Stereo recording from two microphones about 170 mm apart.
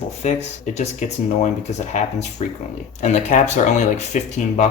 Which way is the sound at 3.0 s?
45° left (ahead or behind).